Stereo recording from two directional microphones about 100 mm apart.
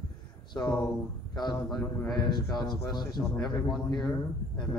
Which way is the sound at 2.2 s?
45° left (ahead or behind).